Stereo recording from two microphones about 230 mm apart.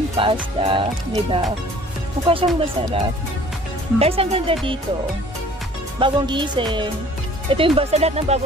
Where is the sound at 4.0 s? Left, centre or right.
Right.